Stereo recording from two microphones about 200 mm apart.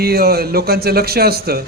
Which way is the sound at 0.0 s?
50° right (ahead or behind).